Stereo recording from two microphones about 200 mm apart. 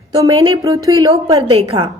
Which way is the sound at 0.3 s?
30° right (ahead or behind).